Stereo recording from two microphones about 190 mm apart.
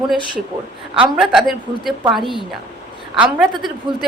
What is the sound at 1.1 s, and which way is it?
Speech, centre (ahead or behind).